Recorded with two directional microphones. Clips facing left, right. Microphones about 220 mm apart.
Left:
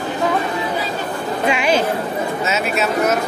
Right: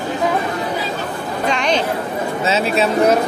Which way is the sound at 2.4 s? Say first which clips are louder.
Right 5 dB; 30° right (ahead or behind).